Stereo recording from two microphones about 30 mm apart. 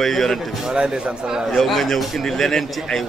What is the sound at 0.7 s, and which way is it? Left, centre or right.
Speech, right.